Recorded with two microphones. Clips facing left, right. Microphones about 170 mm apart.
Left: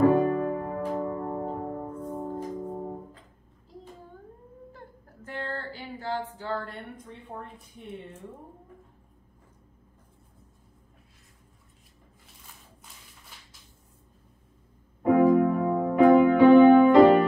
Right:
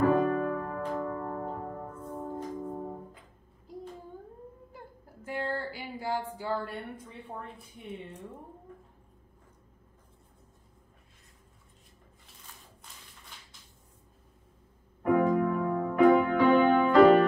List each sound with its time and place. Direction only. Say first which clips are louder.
0.2 s music: left 2 dB; 25° left (ahead or behind)
4.7 s a sound: left 1 dB; 10° right (ahead or behind)
15.1 s music: left 6 dB; 20° left (ahead or behind)